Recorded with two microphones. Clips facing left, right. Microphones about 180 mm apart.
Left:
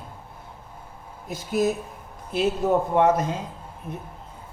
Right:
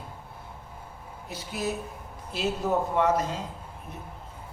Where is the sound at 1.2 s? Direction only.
45° left (ahead or behind).